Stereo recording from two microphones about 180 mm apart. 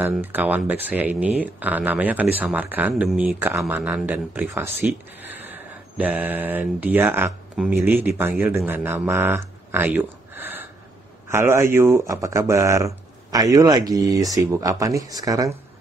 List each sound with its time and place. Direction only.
0.0 s speech: 10° right (ahead or behind)